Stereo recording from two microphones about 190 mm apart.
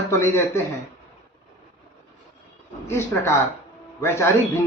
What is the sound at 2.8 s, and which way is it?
Speech, 15° left (ahead or behind).